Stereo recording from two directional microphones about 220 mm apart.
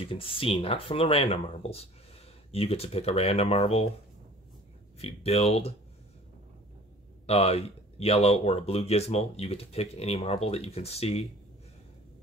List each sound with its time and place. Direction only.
0.0 s speech: 25° left (ahead or behind)
4.9 s speech: 30° left (ahead or behind)
7.2 s speech: 30° left (ahead or behind)